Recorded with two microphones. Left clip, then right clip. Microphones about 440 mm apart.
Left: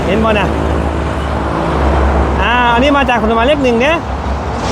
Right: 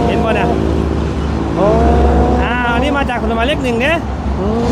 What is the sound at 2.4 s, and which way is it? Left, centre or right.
Speech, left.